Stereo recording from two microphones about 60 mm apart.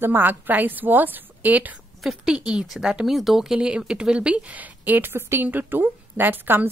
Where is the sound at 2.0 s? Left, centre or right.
Centre.